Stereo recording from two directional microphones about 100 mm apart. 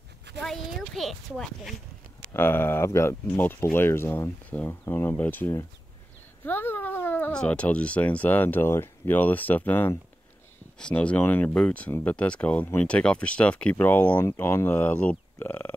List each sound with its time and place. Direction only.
0.4 s speech: centre (ahead or behind)
2.3 s speech: 20° left (ahead or behind)